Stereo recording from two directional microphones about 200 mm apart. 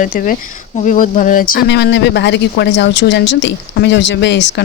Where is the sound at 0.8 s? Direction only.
40° left (ahead or behind).